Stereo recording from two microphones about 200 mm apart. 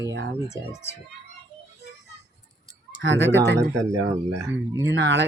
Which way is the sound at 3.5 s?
15° right (ahead or behind).